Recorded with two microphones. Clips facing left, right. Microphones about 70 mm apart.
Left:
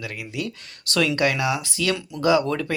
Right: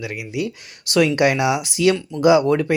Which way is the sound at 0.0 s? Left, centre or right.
Centre.